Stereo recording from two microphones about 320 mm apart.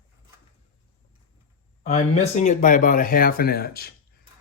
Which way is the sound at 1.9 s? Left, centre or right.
Left.